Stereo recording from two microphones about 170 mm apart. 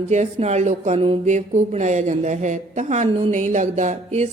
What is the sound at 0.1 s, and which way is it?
A woman's voice, 40° right (ahead or behind).